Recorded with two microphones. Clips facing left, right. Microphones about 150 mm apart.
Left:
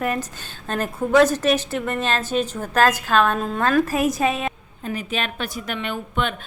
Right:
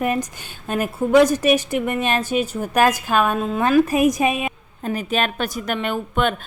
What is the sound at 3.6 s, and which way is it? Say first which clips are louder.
Speech: right 4 dB; 15° right (ahead or behind).